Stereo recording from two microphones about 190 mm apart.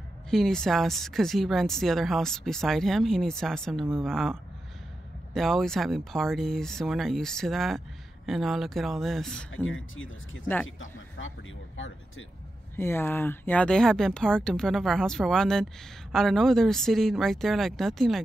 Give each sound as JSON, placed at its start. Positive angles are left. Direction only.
{"t": 0.3, "sound": "speech", "side_deg": 0}
{"t": 9.7, "sound": "speech", "side_deg": 90}
{"t": 12.7, "sound": "speech", "side_deg": 10}